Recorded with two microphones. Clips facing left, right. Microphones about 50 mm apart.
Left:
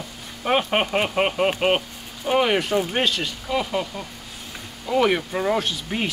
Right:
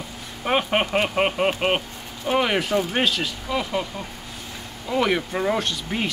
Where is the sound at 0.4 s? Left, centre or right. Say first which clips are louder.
Left 1 dB; centre.